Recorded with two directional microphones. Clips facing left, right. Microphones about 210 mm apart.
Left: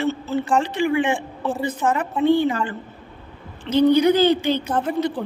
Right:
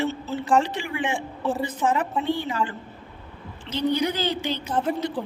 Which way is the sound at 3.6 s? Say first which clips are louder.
Left 9 dB; 60° left (ahead or behind).